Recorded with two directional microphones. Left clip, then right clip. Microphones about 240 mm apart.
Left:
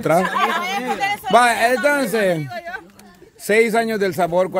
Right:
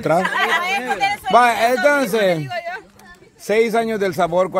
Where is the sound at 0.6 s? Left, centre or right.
Centre.